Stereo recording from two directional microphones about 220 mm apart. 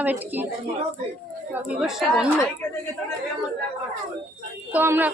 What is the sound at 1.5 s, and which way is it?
Speech, 5° right (ahead or behind).